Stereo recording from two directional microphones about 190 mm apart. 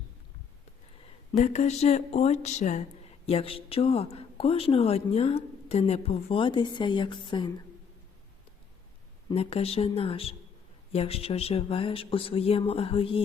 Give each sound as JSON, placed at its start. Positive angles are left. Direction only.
{"t": 1.0, "sound": "speech", "side_deg": 35}
{"t": 9.3, "sound": "speech", "side_deg": 30}